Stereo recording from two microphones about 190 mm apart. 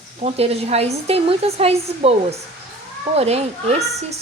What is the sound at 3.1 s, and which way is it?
Speech, 35° right (ahead or behind).